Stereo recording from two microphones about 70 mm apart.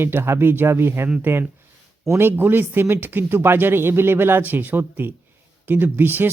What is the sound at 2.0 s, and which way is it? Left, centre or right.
Speech, right.